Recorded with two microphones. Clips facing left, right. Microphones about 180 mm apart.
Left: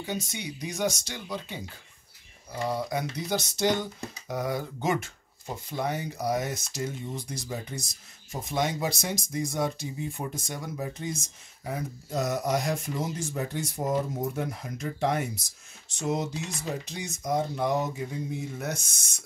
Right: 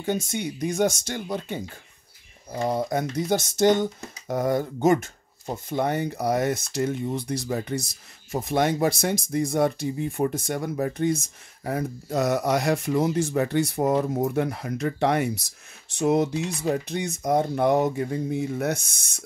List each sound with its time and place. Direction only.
0.0 s speech: 50° right (ahead or behind)
2.6 s speech: 50° right (ahead or behind)